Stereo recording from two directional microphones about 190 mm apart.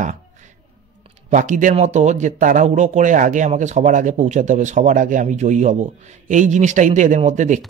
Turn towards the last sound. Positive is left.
turn(degrees=-40)  # may be behind; listen again after turning